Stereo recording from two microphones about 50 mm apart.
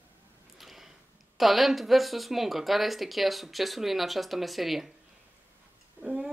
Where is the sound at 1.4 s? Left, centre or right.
Centre.